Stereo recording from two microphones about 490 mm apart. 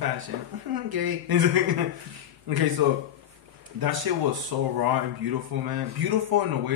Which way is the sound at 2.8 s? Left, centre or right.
Right.